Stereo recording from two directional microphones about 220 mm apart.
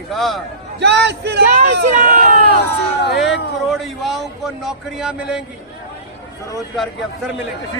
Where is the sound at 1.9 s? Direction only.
35° right (ahead or behind).